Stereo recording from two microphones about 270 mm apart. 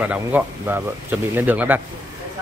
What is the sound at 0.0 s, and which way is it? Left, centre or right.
Speech, centre.